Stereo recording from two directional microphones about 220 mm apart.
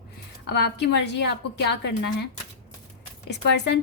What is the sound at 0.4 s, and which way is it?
A woman's voice, 50° left (ahead or behind).